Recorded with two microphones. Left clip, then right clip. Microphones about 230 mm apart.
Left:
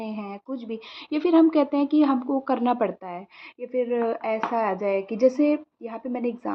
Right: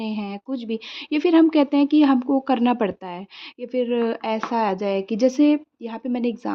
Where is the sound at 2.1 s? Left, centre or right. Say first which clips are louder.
Right 4 dB; right.